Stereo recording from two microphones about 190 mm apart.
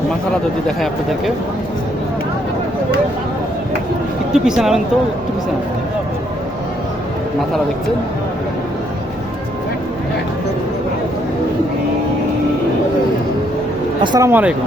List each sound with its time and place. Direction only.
4.4 s speech: 5° right (ahead or behind)
14.0 s speech: 25° right (ahead or behind)
14.3 s speech: 10° right (ahead or behind)